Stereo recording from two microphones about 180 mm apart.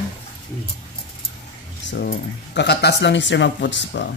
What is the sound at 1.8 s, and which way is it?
Speech, 65° left (ahead or behind).